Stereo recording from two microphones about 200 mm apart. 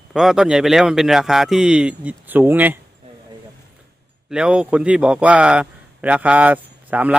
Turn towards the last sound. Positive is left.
turn(degrees=-10)  # may be behind; listen again after turning